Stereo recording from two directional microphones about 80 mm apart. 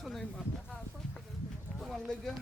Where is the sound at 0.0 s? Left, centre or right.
Centre.